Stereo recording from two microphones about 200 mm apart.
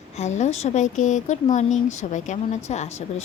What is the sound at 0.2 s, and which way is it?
A woman's voice, 35° left (ahead or behind).